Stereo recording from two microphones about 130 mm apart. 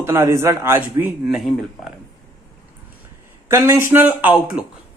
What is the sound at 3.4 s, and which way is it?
A man's voice, 20° right (ahead or behind).